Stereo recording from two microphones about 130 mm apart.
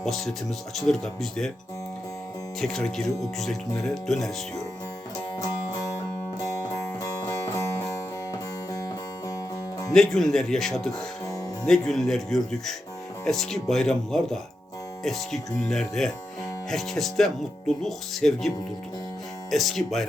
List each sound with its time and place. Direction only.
0.0 s speech: centre (ahead or behind)
2.6 s speech: 5° left (ahead or behind)
7.0 s music: 20° left (ahead or behind)
9.9 s speech: 5° left (ahead or behind)